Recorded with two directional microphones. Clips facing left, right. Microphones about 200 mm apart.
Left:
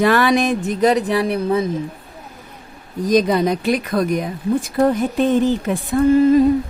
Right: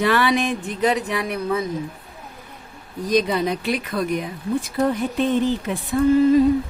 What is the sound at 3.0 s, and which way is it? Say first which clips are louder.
Speech: left 4 dB; 45° left (ahead or behind).